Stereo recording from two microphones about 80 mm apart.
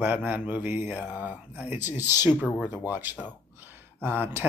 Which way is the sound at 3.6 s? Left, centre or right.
Right.